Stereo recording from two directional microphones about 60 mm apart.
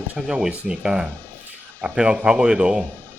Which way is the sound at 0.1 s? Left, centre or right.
Centre.